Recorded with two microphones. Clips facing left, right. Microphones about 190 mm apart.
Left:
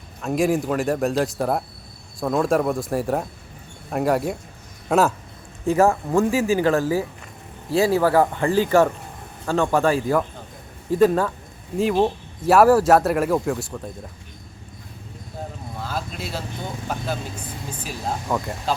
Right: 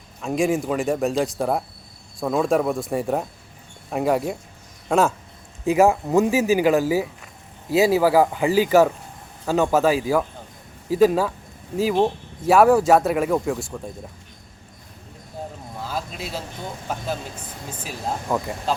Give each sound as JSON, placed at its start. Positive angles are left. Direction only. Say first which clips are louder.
{"t": 0.2, "sound": "speech", "louder": "left 1 dB", "side_deg": 0}
{"t": 5.6, "sound": "speech", "louder": "right 1 dB", "side_deg": -15}
{"t": 15.8, "sound": "speech", "louder": "even", "side_deg": 0}
{"t": 17.8, "sound": "speech", "louder": "even", "side_deg": -5}